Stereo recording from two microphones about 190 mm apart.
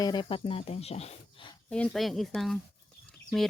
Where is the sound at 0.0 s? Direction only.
25° left (ahead or behind).